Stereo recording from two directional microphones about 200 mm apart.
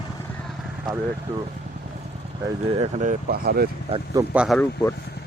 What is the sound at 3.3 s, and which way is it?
Speech, 50° right (ahead or behind).